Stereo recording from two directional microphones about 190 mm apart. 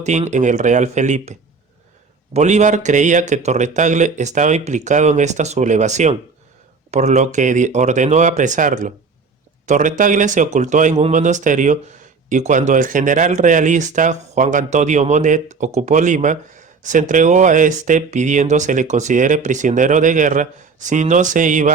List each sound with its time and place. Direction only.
0.0 s speech: 35° right (ahead or behind)